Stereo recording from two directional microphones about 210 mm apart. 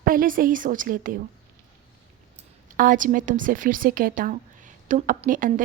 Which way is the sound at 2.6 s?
40° right (ahead or behind).